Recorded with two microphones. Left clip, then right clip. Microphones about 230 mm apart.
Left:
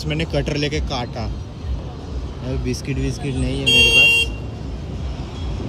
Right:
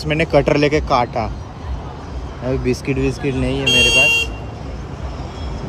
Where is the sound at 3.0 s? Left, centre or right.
Right.